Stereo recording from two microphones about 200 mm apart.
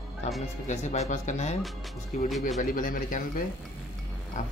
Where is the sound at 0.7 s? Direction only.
35° left (ahead or behind).